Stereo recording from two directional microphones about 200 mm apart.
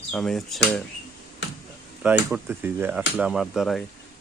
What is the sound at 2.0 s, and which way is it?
Speech, 10° right (ahead or behind).